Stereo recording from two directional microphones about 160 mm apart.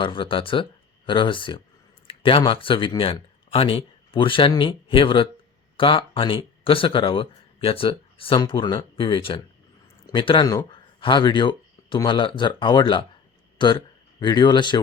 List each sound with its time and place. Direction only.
0.0 s a man's voice: 30° left (ahead or behind)